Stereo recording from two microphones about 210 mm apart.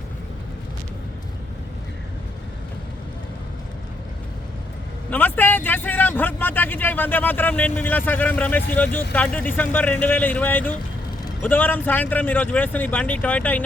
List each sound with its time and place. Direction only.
5.1 s speech: 10° left (ahead or behind)